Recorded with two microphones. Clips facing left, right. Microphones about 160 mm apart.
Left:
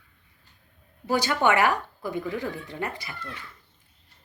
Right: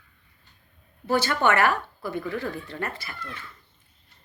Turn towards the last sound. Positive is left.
turn(degrees=15)  # may be behind; listen again after turning